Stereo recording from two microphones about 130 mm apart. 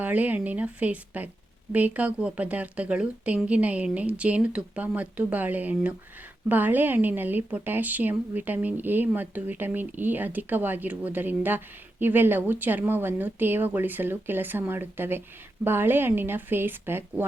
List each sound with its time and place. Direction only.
0.0 s a woman's voice: 10° right (ahead or behind)